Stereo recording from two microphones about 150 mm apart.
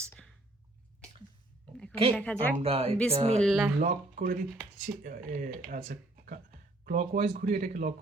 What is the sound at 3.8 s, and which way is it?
Speech, 60° right (ahead or behind).